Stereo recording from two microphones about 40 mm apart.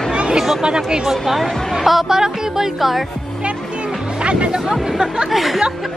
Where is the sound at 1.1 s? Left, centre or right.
Centre.